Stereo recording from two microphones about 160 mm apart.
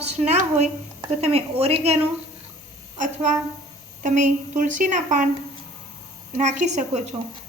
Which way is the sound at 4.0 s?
55° right (ahead or behind).